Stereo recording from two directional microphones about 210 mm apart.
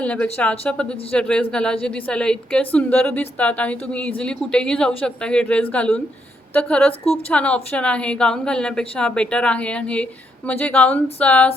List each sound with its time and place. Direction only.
0.0 s a woman's voice: 5° left (ahead or behind)